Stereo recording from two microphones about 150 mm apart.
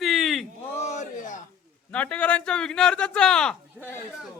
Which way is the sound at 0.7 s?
50° left (ahead or behind).